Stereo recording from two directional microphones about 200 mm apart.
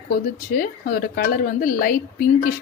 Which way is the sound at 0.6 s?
45° left (ahead or behind).